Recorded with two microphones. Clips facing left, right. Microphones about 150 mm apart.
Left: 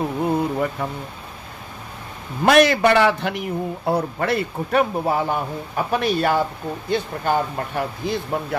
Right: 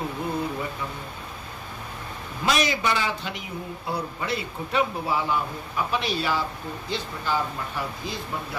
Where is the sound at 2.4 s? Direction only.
60° left (ahead or behind).